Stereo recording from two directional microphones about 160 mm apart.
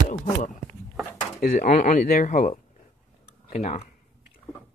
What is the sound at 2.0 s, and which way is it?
Speech, 60° left (ahead or behind).